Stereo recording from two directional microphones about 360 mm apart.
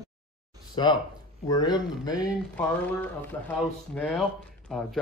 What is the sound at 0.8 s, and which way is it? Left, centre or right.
Speech, centre.